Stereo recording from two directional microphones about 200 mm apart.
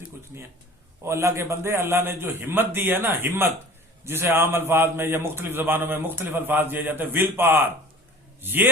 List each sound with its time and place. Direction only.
1.0 s a man's voice: 15° right (ahead or behind)